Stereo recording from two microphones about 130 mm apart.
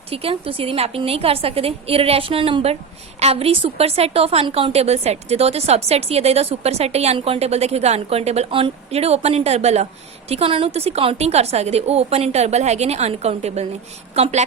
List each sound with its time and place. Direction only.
0.1 s a woman's voice: 45° right (ahead or behind)